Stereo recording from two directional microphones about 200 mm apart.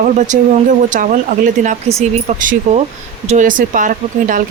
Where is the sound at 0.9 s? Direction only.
40° right (ahead or behind).